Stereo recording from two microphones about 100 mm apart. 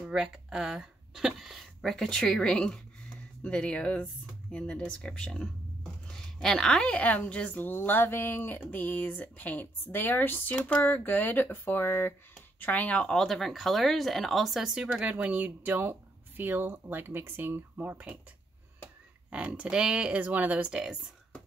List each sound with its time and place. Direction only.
0.1 s a woman's voice: 5° right (ahead or behind)
19.3 s speech: 10° right (ahead or behind)